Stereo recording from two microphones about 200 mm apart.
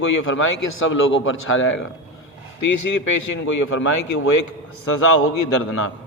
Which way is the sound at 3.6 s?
90° left.